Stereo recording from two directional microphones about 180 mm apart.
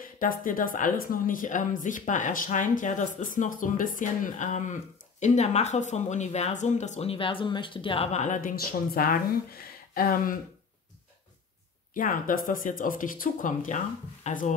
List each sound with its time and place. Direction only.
0.0 s speech: 50° left (ahead or behind)
11.9 s speech: 50° left (ahead or behind)